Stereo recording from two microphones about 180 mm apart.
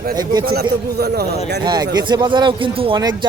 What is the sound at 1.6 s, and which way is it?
Speech, 25° right (ahead or behind).